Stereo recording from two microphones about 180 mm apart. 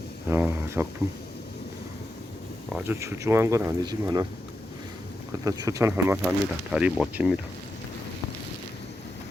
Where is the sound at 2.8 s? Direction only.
15° right (ahead or behind).